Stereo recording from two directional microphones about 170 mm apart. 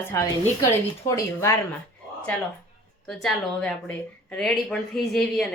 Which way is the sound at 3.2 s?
5° left (ahead or behind).